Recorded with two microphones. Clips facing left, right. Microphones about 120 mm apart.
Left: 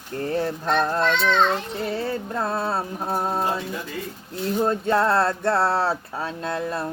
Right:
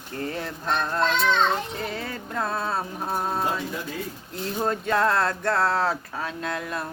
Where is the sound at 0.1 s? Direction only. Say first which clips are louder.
Left 6 dB; 35° left (ahead or behind).